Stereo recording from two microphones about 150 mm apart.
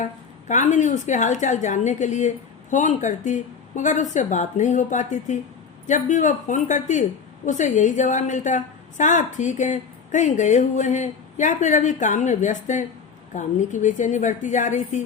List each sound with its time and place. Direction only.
0.0 s a woman's voice: 55° left (ahead or behind)